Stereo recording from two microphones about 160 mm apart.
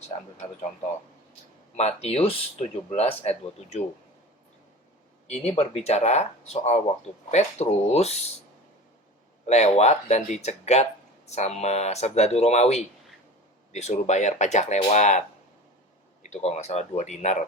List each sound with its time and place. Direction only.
1.7 s speech: 40° left (ahead or behind)
5.3 s speech: 40° left (ahead or behind)
9.5 s speech: 45° left (ahead or behind)
16.2 s speech: 45° left (ahead or behind)